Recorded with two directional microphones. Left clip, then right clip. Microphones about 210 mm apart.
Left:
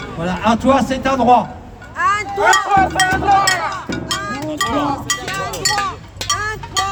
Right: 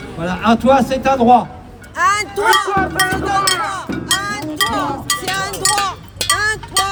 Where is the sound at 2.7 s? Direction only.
50° left (ahead or behind).